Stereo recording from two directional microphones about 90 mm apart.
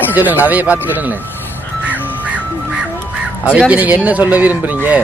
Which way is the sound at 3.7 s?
20° right (ahead or behind).